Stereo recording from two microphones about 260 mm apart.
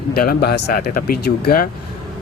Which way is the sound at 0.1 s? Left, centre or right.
Left.